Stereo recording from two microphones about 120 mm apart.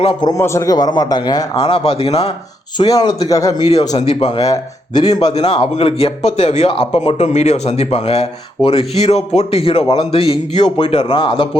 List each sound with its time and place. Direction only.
0.2 s a man's voice: 30° left (ahead or behind)
1.6 s a man's voice: 55° left (ahead or behind)
2.7 s a man's voice: 35° left (ahead or behind)
3.9 s speech: 65° left (ahead or behind)
4.3 s a man's voice: 30° left (ahead or behind)
5.3 s a man's voice: 50° left (ahead or behind)